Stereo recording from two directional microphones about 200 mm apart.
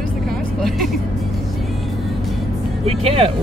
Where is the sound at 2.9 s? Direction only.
30° right (ahead or behind).